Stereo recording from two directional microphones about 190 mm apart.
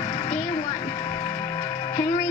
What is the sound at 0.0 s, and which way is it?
Music, 30° left (ahead or behind).